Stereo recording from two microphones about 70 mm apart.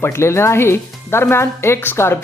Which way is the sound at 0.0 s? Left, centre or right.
Left.